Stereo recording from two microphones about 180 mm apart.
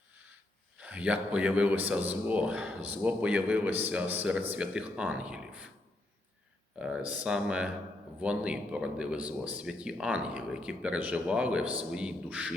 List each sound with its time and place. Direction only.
0.8 s a man's voice: 5° right (ahead or behind)
6.7 s a man's voice: 5° right (ahead or behind)